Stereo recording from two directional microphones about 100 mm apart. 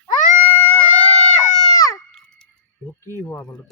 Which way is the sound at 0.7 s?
15° left (ahead or behind).